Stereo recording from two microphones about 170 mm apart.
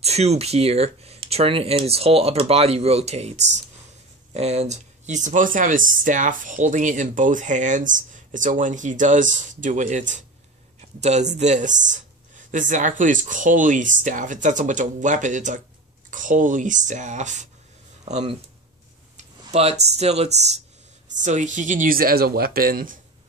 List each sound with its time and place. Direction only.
0.0 s speech: 40° right (ahead or behind); by 22.9 s 55° right (ahead or behind)